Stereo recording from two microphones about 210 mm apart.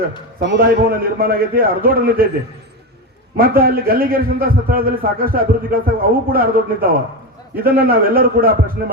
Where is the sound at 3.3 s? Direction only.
45° right (ahead or behind).